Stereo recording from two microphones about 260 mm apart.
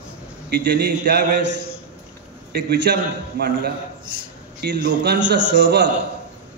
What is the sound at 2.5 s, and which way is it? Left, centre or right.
A man's voice, right.